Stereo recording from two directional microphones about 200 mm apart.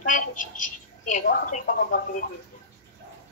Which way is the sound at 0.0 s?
40° left (ahead or behind).